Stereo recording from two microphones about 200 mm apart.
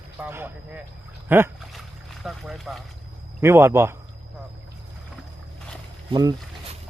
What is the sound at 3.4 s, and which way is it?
Speech, 15° right (ahead or behind).